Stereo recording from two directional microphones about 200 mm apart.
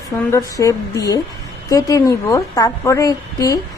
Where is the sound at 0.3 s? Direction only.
15° left (ahead or behind).